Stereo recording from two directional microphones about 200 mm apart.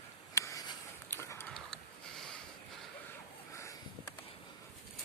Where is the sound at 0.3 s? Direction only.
15° left (ahead or behind).